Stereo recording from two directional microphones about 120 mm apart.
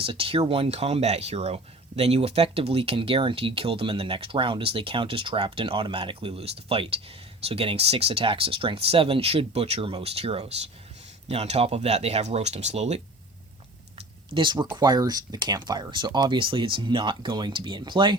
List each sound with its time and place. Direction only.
0.0 s speech: 50° right (ahead or behind); by 13.0 s 65° right (ahead or behind)
14.3 s speech: 45° right (ahead or behind)